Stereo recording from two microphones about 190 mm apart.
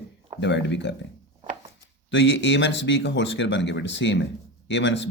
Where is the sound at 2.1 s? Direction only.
70° left (ahead or behind).